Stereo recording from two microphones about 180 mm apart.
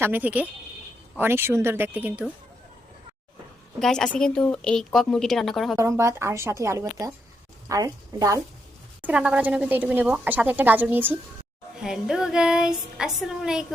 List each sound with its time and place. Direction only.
0.0 s a woman's voice: 10° right (ahead or behind)
3.8 s speech: 5° left (ahead or behind)
5.7 s a woman's voice: 15° right (ahead or behind)
9.0 s a woman's voice: 5° right (ahead or behind)